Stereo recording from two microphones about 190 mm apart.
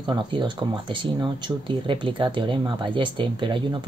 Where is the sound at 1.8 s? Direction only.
25° right (ahead or behind).